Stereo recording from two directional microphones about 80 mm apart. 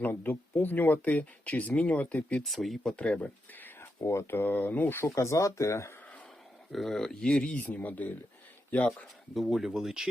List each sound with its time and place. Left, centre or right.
0.0 s speech: left
2.4 s speech: centre
2.9 s speech: centre
3.8 s speech: left
5.1 s speech: left
6.7 s speech: centre; by 8.1 s left
9.3 s speech: centre